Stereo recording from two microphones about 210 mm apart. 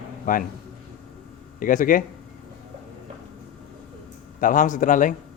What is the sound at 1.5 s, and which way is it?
Speech, 40° left (ahead or behind).